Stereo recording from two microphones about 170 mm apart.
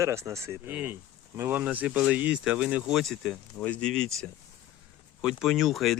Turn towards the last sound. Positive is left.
turn(degrees=0)  # may be behind; listen again after turning